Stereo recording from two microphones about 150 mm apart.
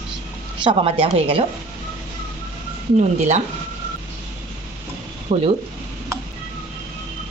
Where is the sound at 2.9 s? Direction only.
55° right (ahead or behind).